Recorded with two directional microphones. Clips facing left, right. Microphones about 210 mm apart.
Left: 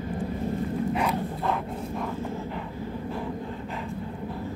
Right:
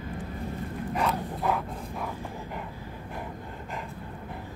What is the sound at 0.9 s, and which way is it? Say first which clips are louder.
Dog: left 2 dB; 10° left (ahead or behind).